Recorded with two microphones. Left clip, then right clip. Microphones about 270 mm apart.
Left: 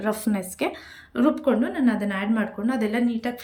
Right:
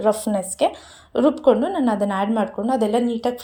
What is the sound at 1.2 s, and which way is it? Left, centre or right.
Speech, right.